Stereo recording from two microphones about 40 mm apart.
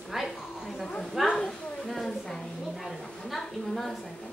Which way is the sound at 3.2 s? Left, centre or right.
Centre.